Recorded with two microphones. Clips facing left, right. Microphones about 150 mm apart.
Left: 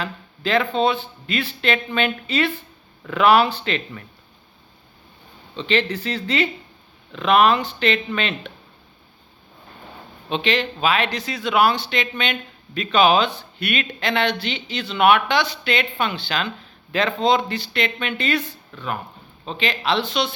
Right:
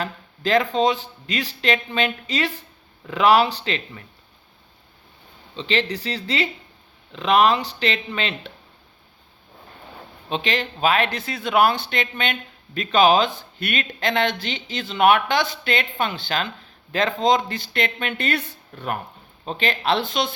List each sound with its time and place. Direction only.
0.0 s speech: 40° right (ahead or behind)
5.5 s speech: 30° right (ahead or behind)
10.2 s speech: 40° right (ahead or behind)
19.5 s speech: 50° right (ahead or behind)